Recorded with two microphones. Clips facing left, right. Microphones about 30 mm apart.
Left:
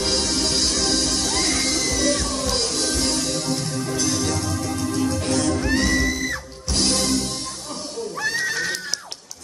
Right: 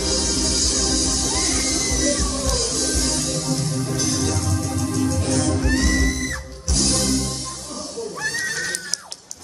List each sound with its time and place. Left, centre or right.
0.0 s music: left
8.2 s neigh: centre